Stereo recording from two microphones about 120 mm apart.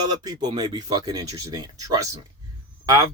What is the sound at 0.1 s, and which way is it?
Speech, 35° right (ahead or behind).